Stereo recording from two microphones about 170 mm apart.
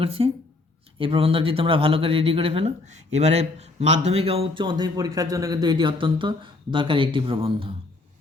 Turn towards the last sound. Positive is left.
turn(degrees=-30)  # may be behind; listen again after turning